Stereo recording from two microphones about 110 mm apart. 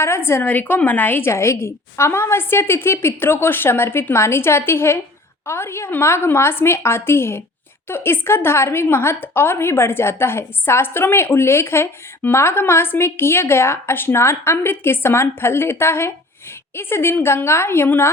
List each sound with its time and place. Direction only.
0.0 s a woman's voice: 25° left (ahead or behind)